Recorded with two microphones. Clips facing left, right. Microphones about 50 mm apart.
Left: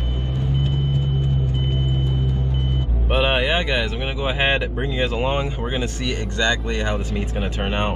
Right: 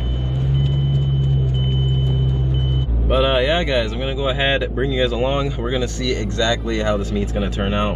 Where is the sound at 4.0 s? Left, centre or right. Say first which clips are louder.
Right 2 dB; left.